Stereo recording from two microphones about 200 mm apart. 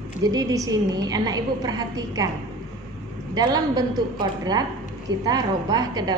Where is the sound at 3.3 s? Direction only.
20° right (ahead or behind).